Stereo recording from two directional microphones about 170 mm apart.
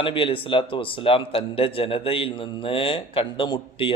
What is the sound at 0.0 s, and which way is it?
A man's voice, 30° left (ahead or behind).